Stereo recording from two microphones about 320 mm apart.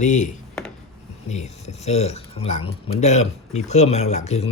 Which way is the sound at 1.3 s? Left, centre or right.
Left.